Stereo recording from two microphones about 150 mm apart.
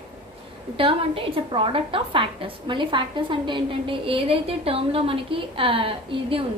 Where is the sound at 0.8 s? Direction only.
35° right (ahead or behind).